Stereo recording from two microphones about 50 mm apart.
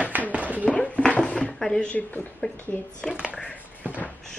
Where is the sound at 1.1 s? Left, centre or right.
Left.